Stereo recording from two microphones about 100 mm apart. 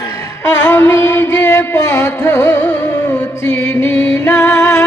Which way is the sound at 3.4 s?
10° left (ahead or behind).